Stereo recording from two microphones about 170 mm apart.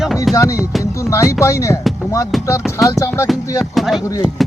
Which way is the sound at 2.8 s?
20° left (ahead or behind).